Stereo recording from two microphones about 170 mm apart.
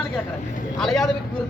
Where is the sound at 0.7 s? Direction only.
Centre (ahead or behind).